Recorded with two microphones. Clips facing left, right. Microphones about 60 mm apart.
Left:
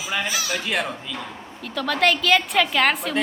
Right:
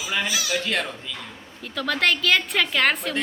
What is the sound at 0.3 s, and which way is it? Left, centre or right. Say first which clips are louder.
Speech: even; left.